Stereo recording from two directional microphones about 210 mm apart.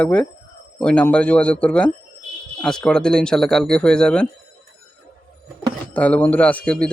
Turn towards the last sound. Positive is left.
turn(degrees=5)  # may be behind; listen again after turning